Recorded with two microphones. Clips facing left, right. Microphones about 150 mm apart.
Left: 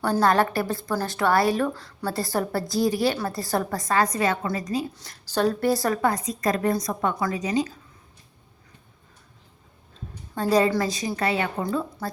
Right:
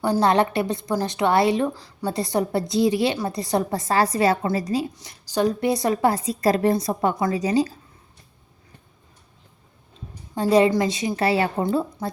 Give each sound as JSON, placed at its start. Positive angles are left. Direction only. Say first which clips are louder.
{"t": 0.0, "sound": "a woman's voice", "louder": "right 2 dB", "side_deg": -20}
{"t": 4.9, "sound": "a woman's voice", "louder": "right 2 dB", "side_deg": -10}
{"t": 10.4, "sound": "a woman's voice", "louder": "right 3 dB", "side_deg": -20}